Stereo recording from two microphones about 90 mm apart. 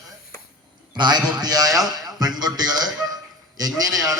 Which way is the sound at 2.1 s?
50° right (ahead or behind).